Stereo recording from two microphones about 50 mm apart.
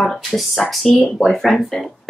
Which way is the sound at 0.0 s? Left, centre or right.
Centre.